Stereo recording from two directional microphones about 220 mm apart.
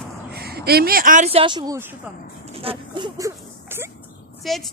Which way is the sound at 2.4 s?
25° right (ahead or behind).